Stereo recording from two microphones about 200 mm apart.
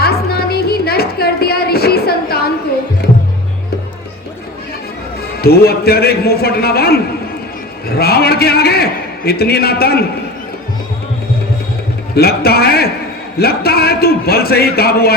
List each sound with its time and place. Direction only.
0.0 s music: 50° left (ahead or behind)
5.4 s a man's voice: 50° left (ahead or behind)
7.9 s a man's voice: 50° left (ahead or behind)
12.1 s a man's voice: 50° left (ahead or behind)